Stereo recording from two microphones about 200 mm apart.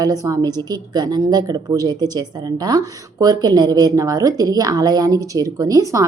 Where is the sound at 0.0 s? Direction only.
20° right (ahead or behind).